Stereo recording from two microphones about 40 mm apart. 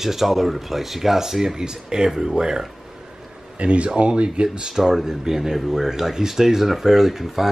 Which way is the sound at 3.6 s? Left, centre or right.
Right.